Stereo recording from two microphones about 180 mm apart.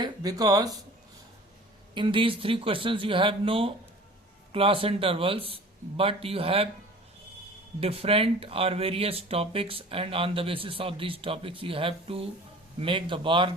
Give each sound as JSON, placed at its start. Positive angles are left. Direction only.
{"t": 0.0, "sound": "speech", "side_deg": -20}
{"t": 2.0, "sound": "speech", "side_deg": -30}
{"t": 7.8, "sound": "speech", "side_deg": -35}